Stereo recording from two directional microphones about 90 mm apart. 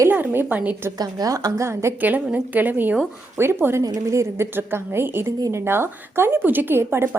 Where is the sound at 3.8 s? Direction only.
40° right (ahead or behind).